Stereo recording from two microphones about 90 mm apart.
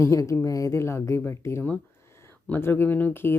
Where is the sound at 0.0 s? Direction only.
35° left (ahead or behind).